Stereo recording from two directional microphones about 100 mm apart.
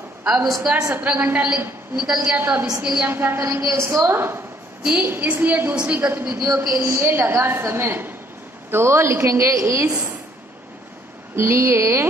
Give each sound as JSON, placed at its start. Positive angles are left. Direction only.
{"t": 0.2, "sound": "a woman's voice", "side_deg": -5}
{"t": 2.3, "sound": "a woman's voice", "side_deg": -20}
{"t": 2.8, "sound": "a woman's voice", "side_deg": -10}
{"t": 3.1, "sound": "a woman's voice", "side_deg": -20}
{"t": 11.3, "sound": "a woman's voice", "side_deg": -25}